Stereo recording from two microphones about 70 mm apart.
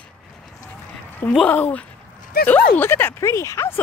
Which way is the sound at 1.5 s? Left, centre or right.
Centre.